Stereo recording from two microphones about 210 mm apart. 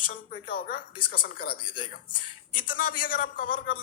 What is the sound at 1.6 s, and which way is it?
Speech, 25° left (ahead or behind).